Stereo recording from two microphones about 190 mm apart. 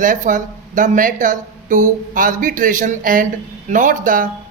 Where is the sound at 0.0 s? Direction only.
45° right (ahead or behind).